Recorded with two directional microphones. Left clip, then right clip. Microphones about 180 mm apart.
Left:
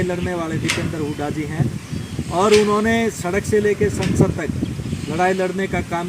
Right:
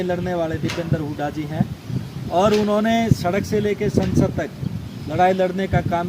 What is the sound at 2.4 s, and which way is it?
Speech, 30° right (ahead or behind).